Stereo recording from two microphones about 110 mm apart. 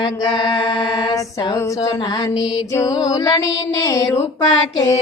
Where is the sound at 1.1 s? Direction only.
30° left (ahead or behind).